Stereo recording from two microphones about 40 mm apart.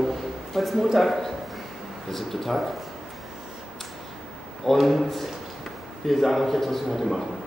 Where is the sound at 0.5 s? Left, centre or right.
Centre.